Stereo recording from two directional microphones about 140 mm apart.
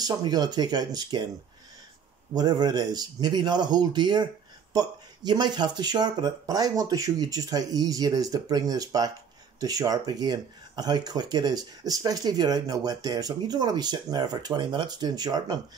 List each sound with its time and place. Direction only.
0.0 s speech: 30° right (ahead or behind)
2.3 s speech: 30° right (ahead or behind)